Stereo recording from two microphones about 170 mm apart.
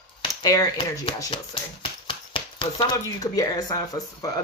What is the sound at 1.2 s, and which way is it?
Speech, 30° left (ahead or behind).